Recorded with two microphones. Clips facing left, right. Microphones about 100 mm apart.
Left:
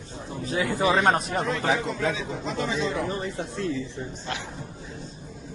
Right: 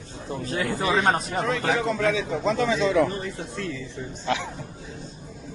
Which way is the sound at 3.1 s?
25° left (ahead or behind).